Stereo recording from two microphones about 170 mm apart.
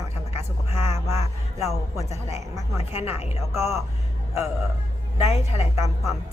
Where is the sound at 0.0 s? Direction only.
15° right (ahead or behind).